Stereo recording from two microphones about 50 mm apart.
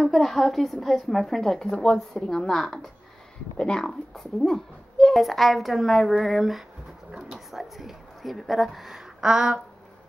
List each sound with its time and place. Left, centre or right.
0.0 s a woman's voice: centre
3.5 s speech: centre
3.8 s a woman's voice: centre